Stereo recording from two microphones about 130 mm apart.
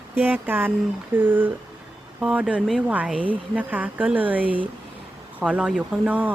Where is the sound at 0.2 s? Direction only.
15° right (ahead or behind).